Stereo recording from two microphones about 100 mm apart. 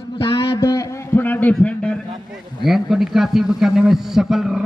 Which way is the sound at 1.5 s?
10° left (ahead or behind).